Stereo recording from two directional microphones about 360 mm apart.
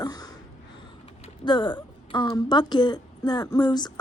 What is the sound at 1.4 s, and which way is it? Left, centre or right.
A woman's voice, centre.